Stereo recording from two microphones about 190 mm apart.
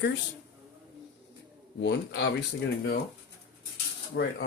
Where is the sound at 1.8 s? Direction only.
65° left (ahead or behind).